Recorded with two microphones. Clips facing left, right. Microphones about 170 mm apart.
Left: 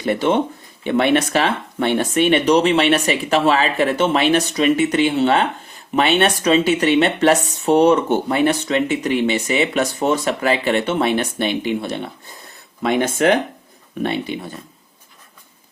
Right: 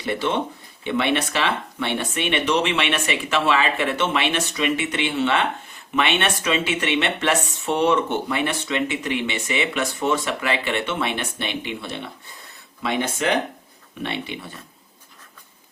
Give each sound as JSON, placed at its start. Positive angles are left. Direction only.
{"t": 0.0, "sound": "speech", "side_deg": 50}